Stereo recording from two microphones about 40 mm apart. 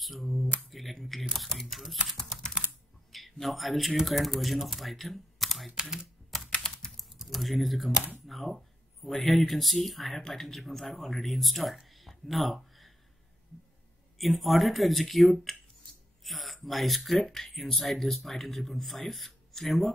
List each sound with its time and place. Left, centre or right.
0.0 s a sound: centre
1.3 s speech: centre
1.7 s speech: centre
3.1 s speech: centre
5.8 s speech: centre
7.0 s typing: centre
8.3 s speech: centre
11.9 s a sound: centre
14.1 s speech: centre